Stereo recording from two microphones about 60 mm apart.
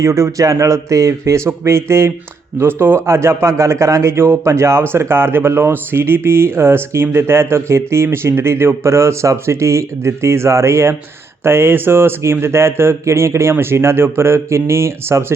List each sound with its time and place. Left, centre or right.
0.0 s a man's voice: right